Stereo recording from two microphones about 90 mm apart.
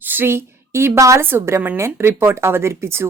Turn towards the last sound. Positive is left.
turn(degrees=-30)  # may be behind; listen again after turning